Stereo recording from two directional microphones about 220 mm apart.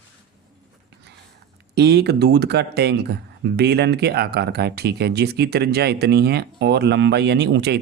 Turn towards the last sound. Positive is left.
turn(degrees=-50)  # may be behind; listen again after turning